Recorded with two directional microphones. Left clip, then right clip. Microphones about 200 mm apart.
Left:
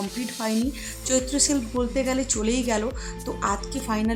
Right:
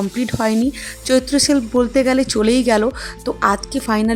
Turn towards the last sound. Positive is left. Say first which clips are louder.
# right 8 dB
turn(degrees=-40)  # may be behind; listen again after turning